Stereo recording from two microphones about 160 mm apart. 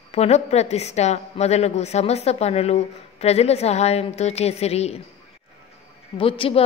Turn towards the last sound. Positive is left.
turn(degrees=35)  # may be behind; listen again after turning